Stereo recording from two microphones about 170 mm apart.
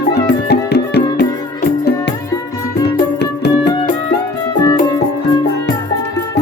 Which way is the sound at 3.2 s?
75° left (ahead or behind).